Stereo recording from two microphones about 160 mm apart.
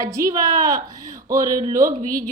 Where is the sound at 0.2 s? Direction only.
20° right (ahead or behind).